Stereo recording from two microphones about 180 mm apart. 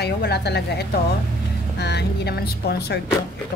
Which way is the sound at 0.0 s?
65° left (ahead or behind).